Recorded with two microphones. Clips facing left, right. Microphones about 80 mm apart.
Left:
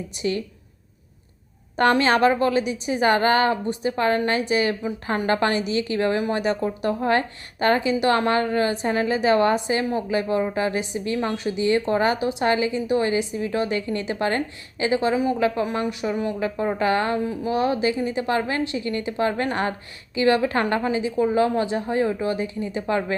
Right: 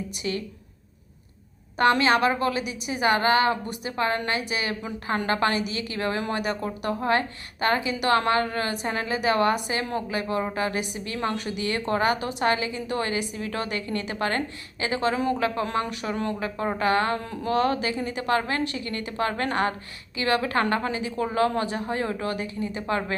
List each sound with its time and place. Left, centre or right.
1.8 s a woman's voice: left
15.1 s speech: centre
15.4 s a woman's voice: left
17.2 s a woman's voice: centre
20.1 s a woman's voice: left